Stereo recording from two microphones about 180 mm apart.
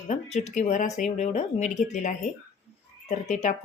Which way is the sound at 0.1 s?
40° left (ahead or behind).